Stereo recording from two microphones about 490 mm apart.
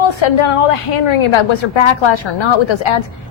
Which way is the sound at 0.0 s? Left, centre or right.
Left.